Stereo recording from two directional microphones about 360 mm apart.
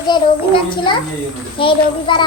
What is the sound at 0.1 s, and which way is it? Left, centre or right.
A child's voice, centre.